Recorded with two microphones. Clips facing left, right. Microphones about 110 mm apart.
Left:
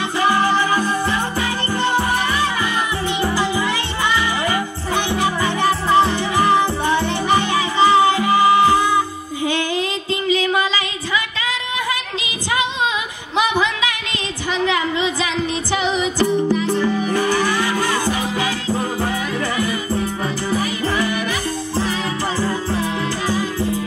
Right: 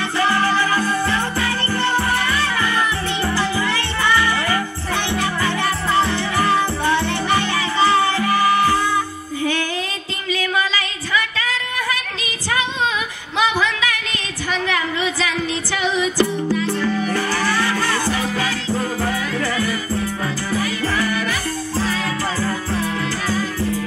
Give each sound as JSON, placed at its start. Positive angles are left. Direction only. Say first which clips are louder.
{"t": 0.2, "sound": "music", "louder": "left 2 dB", "side_deg": 15}
{"t": 10.2, "sound": "a sound", "louder": "left 3 dB", "side_deg": 25}
{"t": 13.4, "sound": "music", "louder": "left 1 dB", "side_deg": 20}